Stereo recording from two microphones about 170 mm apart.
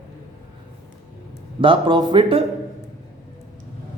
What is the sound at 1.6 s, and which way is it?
Speech, 30° right (ahead or behind).